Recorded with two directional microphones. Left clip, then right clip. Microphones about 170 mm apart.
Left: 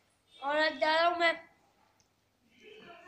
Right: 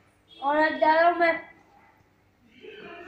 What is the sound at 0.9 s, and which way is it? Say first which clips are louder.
Music: right 8 dB; centre (ahead or behind).